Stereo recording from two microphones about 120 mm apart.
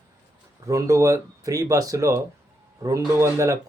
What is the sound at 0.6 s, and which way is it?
Speech, 25° right (ahead or behind).